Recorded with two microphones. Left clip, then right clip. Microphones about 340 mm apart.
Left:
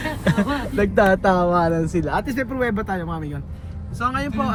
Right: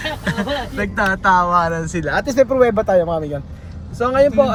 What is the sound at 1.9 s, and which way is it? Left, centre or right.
Speech, right.